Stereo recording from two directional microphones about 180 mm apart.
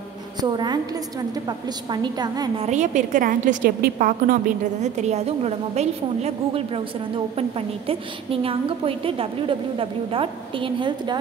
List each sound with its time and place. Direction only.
0.4 s a woman's voice: 25° right (ahead or behind)
1.9 s a woman's voice: 25° right (ahead or behind)
2.6 s a woman's voice: 40° right (ahead or behind)